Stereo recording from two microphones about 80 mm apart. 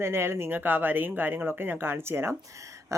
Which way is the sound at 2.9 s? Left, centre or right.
Right.